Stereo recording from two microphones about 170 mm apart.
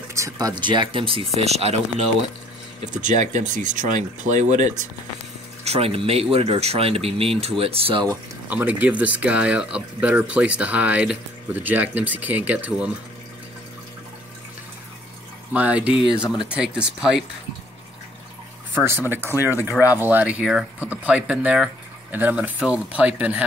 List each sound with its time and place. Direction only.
0.1 s speech: 20° right (ahead or behind); by 1.8 s 35° right (ahead or behind)
2.8 s speech: 45° right (ahead or behind)
8.5 s speech: 10° right (ahead or behind)
15.5 s speech: 10° right (ahead or behind)
18.8 s speech: 10° right (ahead or behind)